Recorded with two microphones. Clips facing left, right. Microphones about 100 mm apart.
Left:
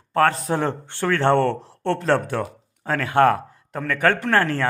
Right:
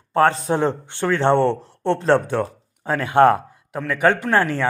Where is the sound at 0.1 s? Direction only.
25° right (ahead or behind).